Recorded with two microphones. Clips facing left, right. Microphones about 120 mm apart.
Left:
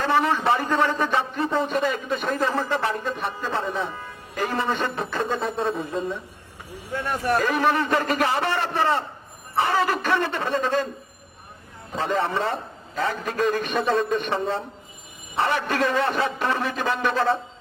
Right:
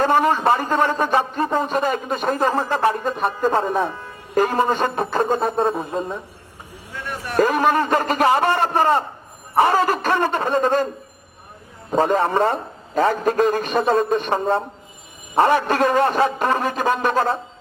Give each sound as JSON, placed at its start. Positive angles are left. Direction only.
{"t": 0.0, "sound": "a man's voice", "side_deg": -45}
{"t": 7.3, "sound": "a man's voice", "side_deg": -45}
{"t": 11.9, "sound": "a man's voice", "side_deg": -45}